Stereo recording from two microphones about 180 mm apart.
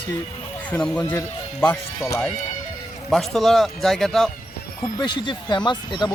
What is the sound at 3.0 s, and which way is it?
Speech, centre (ahead or behind).